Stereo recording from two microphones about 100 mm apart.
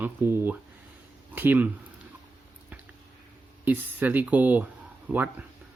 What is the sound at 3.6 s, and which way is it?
A man's voice, 15° right (ahead or behind).